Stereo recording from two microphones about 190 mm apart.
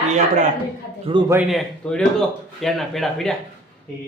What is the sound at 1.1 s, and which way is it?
Speech, 30° right (ahead or behind).